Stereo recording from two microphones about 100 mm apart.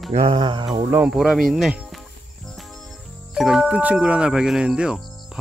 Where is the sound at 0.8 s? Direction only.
20° right (ahead or behind).